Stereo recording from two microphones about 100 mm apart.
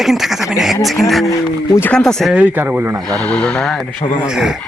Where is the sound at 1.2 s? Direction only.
35° left (ahead or behind).